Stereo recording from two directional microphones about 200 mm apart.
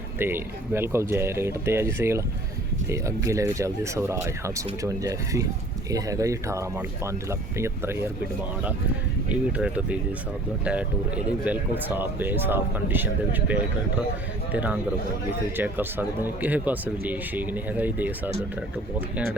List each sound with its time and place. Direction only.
0.2 s speech: 10° right (ahead or behind)
9.3 s speech: 5° right (ahead or behind)